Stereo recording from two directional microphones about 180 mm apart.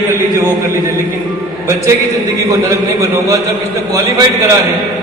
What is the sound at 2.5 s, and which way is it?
Speech, 20° right (ahead or behind).